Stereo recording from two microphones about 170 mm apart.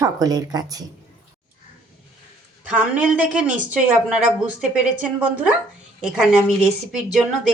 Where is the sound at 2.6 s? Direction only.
10° right (ahead or behind).